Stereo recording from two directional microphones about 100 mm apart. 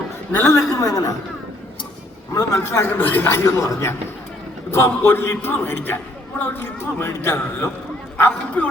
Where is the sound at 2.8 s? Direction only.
20° left (ahead or behind).